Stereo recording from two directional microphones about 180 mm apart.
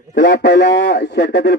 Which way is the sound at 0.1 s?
70° left (ahead or behind).